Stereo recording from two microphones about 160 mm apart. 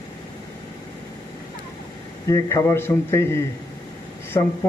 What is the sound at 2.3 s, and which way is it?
Speech, 20° left (ahead or behind).